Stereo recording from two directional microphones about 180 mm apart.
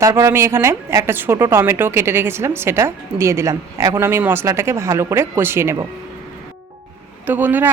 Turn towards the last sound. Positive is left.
turn(degrees=-10)  # may be behind; listen again after turning